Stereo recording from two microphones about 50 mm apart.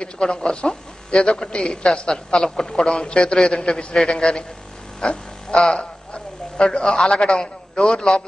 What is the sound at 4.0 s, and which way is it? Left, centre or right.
A man's voice, centre.